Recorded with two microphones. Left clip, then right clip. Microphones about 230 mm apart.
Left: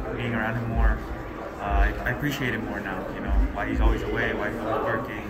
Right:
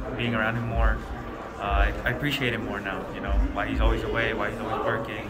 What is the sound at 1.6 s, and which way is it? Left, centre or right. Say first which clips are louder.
A man's voice: right 1 dB; centre.